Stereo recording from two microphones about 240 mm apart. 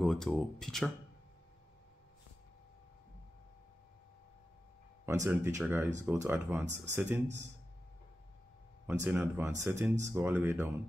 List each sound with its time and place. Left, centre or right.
0.0 s speech: centre
5.0 s speech: centre
8.8 s speech: centre